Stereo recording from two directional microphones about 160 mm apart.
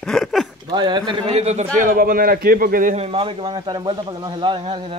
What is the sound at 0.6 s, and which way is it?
Speech, 25° right (ahead or behind).